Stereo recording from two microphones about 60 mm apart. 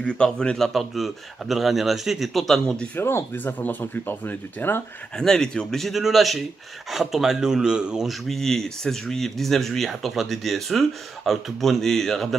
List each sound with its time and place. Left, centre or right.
0.0 s speech: centre
0.7 s speech: centre
2.6 s speech: centre
3.0 s speech: left
5.1 s speech: centre
8.3 s speech: centre